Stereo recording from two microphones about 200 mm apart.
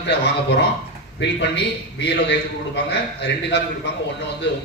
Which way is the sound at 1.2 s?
60° left (ahead or behind).